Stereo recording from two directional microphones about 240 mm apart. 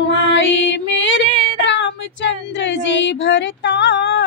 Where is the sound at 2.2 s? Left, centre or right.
Left.